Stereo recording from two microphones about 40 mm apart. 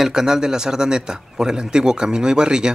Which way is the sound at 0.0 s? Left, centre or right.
Centre.